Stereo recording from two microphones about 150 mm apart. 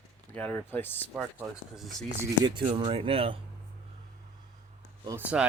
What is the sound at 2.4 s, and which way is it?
Speech, 35° right (ahead or behind).